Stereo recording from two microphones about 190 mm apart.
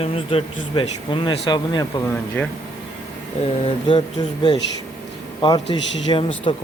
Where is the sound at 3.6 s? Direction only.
25° left (ahead or behind).